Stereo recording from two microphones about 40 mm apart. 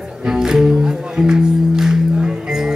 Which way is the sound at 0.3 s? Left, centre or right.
Centre.